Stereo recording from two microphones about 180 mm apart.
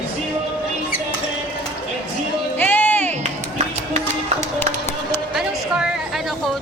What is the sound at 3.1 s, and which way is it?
Music, 40° right (ahead or behind).